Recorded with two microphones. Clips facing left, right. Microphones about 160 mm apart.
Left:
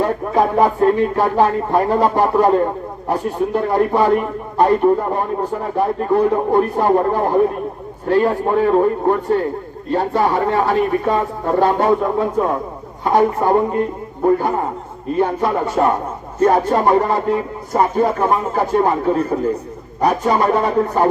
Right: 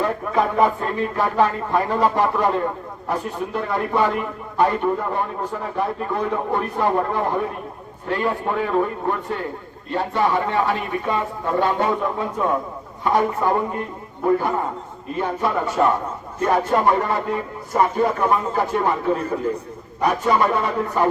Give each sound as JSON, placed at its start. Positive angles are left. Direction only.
{"t": 0.0, "sound": "a man's voice", "side_deg": 35}
{"t": 15.2, "sound": "a man's voice", "side_deg": 40}
{"t": 20.0, "sound": "a man's voice", "side_deg": 40}